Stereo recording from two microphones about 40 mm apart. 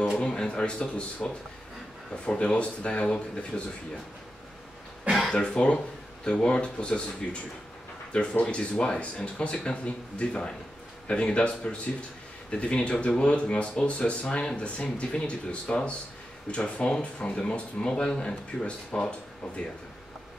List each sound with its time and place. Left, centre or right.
0.2 s speech: left
5.3 s speech: left
7.2 s speech: centre
8.1 s speech: left